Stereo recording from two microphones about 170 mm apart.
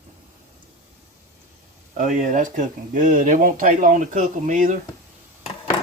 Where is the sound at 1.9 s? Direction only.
50° right (ahead or behind).